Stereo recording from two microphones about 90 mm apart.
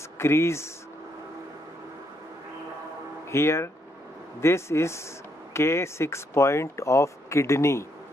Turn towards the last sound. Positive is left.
turn(degrees=30)  # may be behind; listen again after turning